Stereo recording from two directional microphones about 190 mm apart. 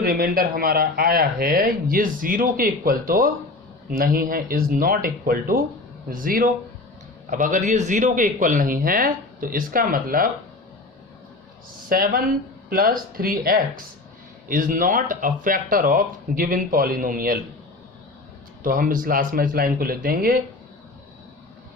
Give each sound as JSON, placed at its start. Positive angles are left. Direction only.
{"t": 0.0, "sound": "speech", "side_deg": -50}
{"t": 11.9, "sound": "speech", "side_deg": -50}
{"t": 18.6, "sound": "speech", "side_deg": -45}